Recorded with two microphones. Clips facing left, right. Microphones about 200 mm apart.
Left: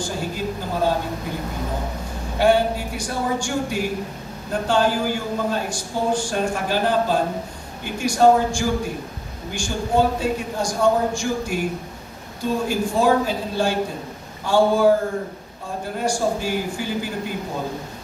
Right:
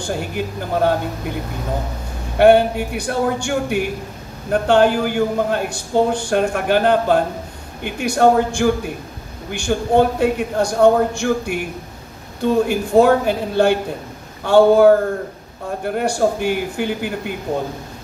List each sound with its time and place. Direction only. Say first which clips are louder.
0.0 s a man's voice: right 3 dB; 60° right (ahead or behind)
2.3 s a man's voice: right 6 dB; 60° right (ahead or behind)